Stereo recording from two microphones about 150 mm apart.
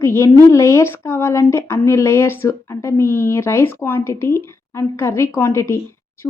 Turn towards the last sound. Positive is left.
turn(degrees=15)  # may be behind; listen again after turning